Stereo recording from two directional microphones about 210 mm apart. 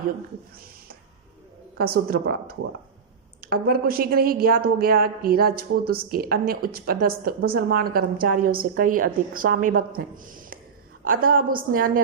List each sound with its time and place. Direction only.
1.8 s a woman's voice: 45° right (ahead or behind)